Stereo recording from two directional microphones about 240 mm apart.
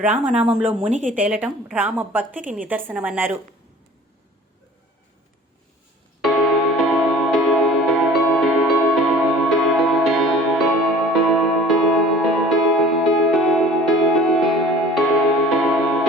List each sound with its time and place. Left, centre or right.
0.0 s speech: centre
0.9 s speech: right
1.1 s a woman's voice: centre
6.2 s music: centre